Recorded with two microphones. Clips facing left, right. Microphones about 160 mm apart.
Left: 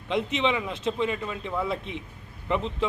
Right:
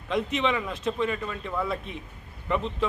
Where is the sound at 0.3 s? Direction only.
20° left (ahead or behind).